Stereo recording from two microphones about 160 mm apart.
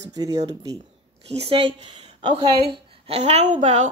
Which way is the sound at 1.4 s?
35° right (ahead or behind).